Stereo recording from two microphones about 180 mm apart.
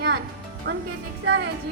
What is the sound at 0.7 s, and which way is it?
Speech, 70° right (ahead or behind).